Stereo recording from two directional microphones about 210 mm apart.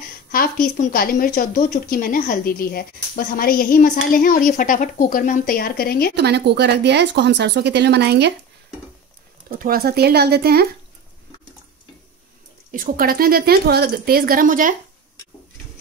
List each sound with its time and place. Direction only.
0.3 s a woman's voice: 45° left (ahead or behind)
6.1 s speech: 50° right (ahead or behind)
9.5 s speech: 45° right (ahead or behind)
12.7 s speech: 40° right (ahead or behind)